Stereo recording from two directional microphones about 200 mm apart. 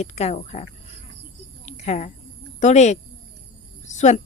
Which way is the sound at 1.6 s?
35° left (ahead or behind).